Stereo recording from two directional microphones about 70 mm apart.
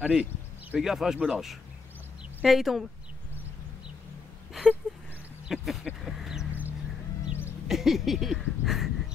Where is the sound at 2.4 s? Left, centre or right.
Centre.